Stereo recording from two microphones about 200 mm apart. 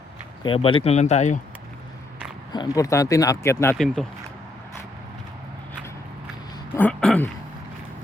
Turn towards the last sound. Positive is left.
turn(degrees=5)  # may be behind; listen again after turning